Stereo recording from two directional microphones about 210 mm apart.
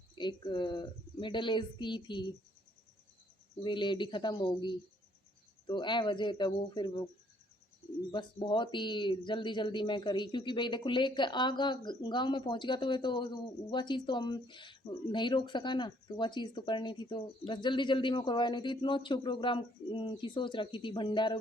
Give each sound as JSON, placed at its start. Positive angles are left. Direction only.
{"t": 0.2, "sound": "speech", "side_deg": 20}
{"t": 3.6, "sound": "speech", "side_deg": 20}
{"t": 8.1, "sound": "speech", "side_deg": 20}